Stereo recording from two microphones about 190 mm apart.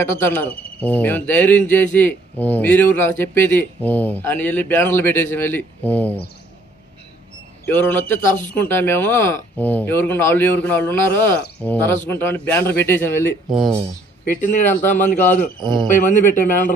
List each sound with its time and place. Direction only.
0.0 s speech: 10° left (ahead or behind)
7.6 s speech: 10° left (ahead or behind)
13.5 s speech: centre (ahead or behind)
14.4 s a man's voice: 40° left (ahead or behind)